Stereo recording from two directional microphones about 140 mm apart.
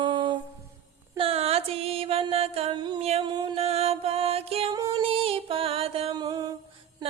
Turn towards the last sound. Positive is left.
turn(degrees=-30)  # may be behind; listen again after turning